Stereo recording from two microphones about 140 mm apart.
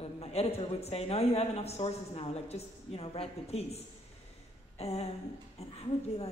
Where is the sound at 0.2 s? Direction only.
45° left (ahead or behind).